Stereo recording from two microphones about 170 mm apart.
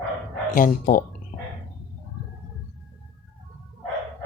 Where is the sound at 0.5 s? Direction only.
55° left (ahead or behind).